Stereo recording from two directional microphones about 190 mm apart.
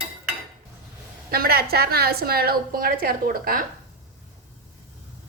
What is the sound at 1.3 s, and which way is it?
A woman's voice, 55° right (ahead or behind).